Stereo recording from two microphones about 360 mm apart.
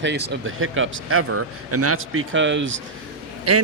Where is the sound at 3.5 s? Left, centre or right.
Right.